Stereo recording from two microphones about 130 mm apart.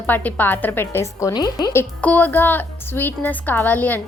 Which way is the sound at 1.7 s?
15° left (ahead or behind).